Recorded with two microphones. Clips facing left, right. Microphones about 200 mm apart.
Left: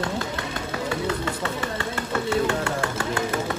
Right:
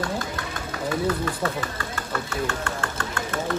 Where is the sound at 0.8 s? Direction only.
25° left (ahead or behind).